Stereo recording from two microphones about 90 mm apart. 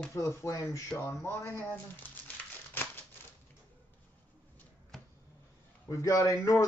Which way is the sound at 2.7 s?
20° left (ahead or behind).